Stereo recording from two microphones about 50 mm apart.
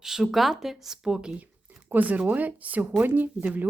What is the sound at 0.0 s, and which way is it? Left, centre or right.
Speech, centre.